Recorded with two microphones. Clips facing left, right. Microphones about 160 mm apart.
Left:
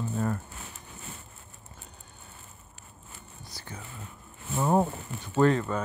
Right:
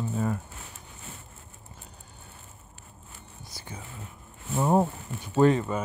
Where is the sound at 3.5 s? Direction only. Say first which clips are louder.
Right 1 dB; 15° right (ahead or behind).